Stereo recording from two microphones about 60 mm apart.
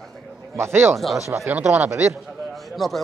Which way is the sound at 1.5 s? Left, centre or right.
Right.